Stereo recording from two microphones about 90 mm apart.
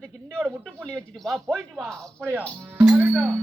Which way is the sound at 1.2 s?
5° left (ahead or behind).